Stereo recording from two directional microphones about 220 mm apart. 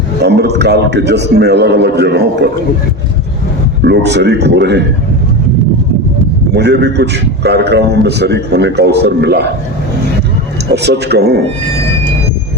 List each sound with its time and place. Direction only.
0.2 s a man's voice: 50° right (ahead or behind)
3.8 s a man's voice: 50° right (ahead or behind)
6.5 s a man's voice: 50° right (ahead or behind)
10.7 s a man's voice: 50° right (ahead or behind)